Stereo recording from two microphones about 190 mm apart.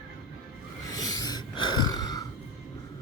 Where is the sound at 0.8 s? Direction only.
20° left (ahead or behind).